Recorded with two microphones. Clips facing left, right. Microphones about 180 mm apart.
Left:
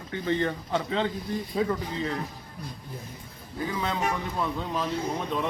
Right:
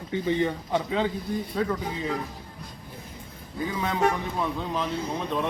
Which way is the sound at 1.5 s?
5° left (ahead or behind).